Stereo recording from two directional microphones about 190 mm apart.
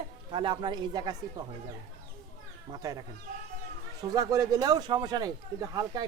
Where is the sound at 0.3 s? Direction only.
25° right (ahead or behind).